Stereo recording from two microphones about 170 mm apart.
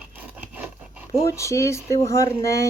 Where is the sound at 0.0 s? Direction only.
10° right (ahead or behind).